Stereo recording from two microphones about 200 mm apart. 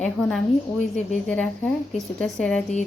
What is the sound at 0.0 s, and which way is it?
A woman's voice, 5° left (ahead or behind).